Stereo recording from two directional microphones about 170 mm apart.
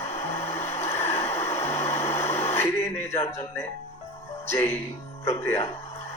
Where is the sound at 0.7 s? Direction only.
40° left (ahead or behind).